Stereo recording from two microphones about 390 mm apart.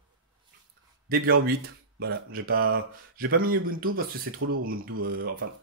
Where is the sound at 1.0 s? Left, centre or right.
Right.